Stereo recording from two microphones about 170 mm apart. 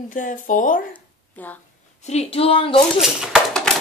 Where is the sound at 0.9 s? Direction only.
10° left (ahead or behind).